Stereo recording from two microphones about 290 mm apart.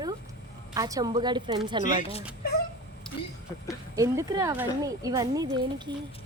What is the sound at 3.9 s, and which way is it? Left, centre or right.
Speech, centre.